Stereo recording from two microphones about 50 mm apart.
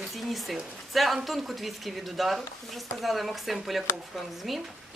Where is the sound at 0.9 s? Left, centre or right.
Centre.